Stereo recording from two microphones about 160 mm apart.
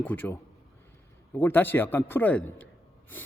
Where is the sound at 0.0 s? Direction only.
10° left (ahead or behind).